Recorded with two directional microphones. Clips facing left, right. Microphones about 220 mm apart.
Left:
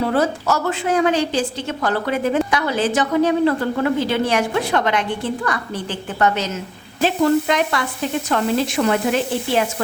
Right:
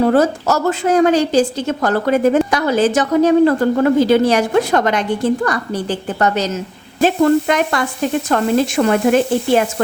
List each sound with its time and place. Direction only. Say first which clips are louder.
0.0 s a woman's voice: right 6 dB; 45° right (ahead or behind)